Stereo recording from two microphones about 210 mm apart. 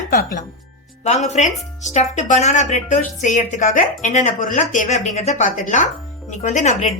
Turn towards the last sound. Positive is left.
turn(degrees=35)  # may be behind; listen again after turning